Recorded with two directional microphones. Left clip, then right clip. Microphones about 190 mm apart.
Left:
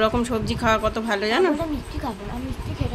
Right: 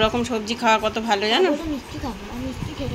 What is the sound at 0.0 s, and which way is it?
Speech, 20° left (ahead or behind).